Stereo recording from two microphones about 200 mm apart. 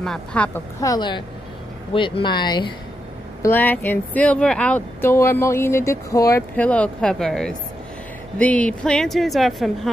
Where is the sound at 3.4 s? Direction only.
10° left (ahead or behind).